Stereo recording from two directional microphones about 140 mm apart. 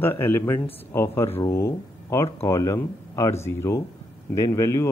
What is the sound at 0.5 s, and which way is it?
Speech, 45° left (ahead or behind).